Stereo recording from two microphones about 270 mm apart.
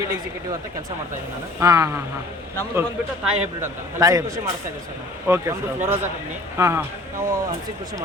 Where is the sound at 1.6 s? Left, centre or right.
Centre.